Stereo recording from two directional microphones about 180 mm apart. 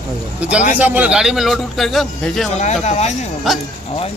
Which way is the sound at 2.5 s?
40° left (ahead or behind).